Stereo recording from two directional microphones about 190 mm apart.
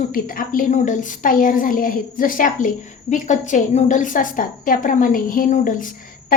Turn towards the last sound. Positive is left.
turn(degrees=45)  # may be behind; listen again after turning